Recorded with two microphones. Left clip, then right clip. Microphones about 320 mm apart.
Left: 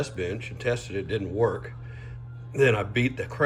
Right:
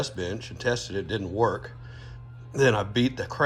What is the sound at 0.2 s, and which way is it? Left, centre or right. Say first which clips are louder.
Speech: left 1 dB; centre.